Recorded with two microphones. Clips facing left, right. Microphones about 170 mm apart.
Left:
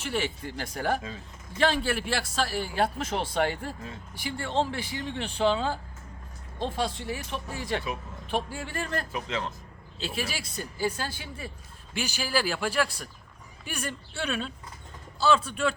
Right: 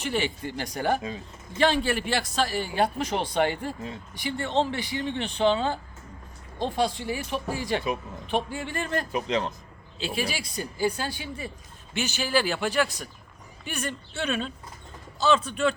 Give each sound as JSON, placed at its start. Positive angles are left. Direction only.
{"t": 0.1, "sound": "a man's voice", "side_deg": 0}
{"t": 9.1, "sound": "speech", "side_deg": -20}
{"t": 10.0, "sound": "a man's voice", "side_deg": 0}